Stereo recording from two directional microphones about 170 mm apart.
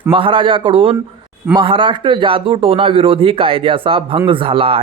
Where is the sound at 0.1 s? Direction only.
30° right (ahead or behind).